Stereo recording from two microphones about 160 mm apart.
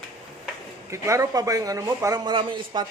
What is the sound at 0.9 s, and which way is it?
Speech, 20° right (ahead or behind).